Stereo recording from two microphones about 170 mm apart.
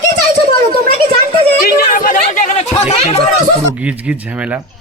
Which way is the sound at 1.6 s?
55° left (ahead or behind).